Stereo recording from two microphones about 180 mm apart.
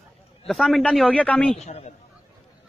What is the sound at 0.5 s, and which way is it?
A man's voice, centre (ahead or behind).